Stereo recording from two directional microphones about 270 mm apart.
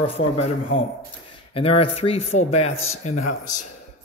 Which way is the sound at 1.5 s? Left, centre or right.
Left.